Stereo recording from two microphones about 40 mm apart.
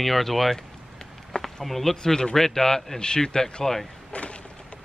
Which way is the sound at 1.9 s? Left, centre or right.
Centre.